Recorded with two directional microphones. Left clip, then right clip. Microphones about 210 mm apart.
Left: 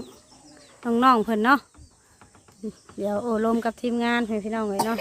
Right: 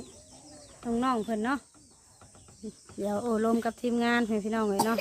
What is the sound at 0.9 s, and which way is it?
Speech, 40° left (ahead or behind).